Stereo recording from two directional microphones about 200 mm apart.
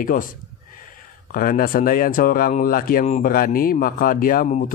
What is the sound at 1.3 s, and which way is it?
Speech, 45° left (ahead or behind).